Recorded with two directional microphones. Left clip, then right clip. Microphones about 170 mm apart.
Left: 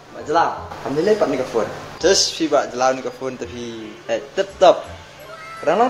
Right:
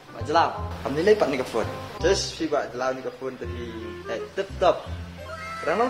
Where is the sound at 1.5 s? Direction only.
40° right (ahead or behind).